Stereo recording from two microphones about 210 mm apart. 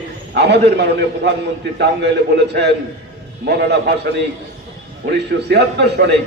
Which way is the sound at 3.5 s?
50° right (ahead or behind).